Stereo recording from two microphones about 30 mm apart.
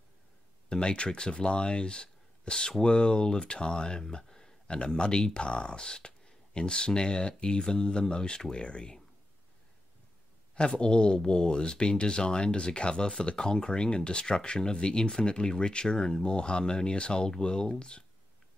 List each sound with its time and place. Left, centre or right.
0.7 s speech: left
4.2 s a sound: centre
4.9 s speech: left
10.8 s speech: left